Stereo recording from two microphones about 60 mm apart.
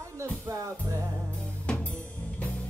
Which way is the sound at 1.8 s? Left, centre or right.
Left.